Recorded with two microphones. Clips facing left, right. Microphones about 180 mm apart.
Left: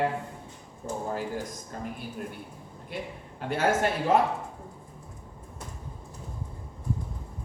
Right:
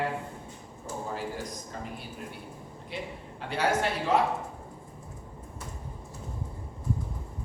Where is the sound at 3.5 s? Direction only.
50° left (ahead or behind).